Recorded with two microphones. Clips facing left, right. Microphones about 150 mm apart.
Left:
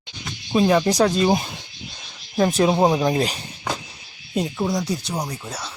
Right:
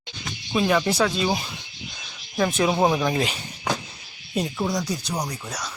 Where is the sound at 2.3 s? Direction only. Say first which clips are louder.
Left 4 dB; 30° left (ahead or behind).